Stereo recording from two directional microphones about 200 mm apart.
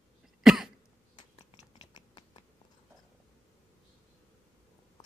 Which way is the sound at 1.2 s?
20° left (ahead or behind).